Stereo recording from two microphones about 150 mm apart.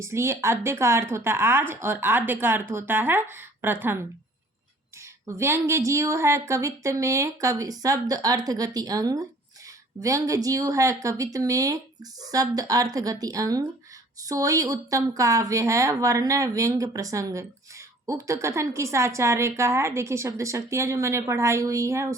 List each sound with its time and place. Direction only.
0.0 s speech: 20° right (ahead or behind)
5.2 s a woman's voice: 20° right (ahead or behind)